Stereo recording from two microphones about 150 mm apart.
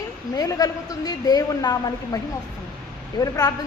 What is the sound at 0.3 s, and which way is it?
A woman's voice, 25° left (ahead or behind).